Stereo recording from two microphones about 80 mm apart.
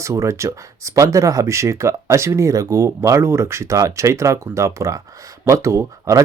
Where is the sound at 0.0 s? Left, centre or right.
Right.